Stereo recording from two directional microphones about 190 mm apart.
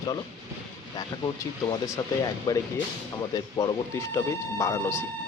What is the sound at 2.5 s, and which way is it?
Speech, 20° left (ahead or behind).